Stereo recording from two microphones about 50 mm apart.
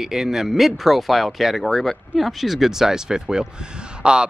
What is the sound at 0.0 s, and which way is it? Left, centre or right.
Speech, centre.